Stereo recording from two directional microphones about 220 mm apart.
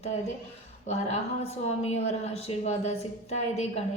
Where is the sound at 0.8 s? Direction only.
30° left (ahead or behind).